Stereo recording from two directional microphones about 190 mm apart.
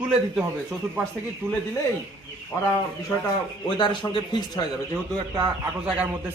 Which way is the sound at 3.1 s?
10° left (ahead or behind).